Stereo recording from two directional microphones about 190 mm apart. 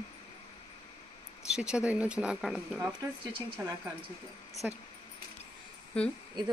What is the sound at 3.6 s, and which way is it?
Speech, 15° right (ahead or behind).